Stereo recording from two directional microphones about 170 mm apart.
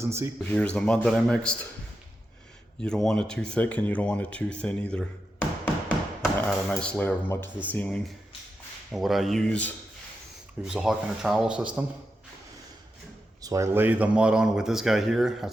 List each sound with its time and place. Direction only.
0.0 s speech: 15° right (ahead or behind)
0.5 s speech: 5° left (ahead or behind)
2.8 s speech: 5° left (ahead or behind)
6.2 s speech: 5° left (ahead or behind)
10.6 s speech: 5° right (ahead or behind)
13.4 s speech: 20° right (ahead or behind); by 15.4 s centre (ahead or behind)